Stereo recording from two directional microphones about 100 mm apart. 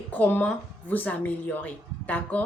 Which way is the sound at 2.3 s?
15° left (ahead or behind).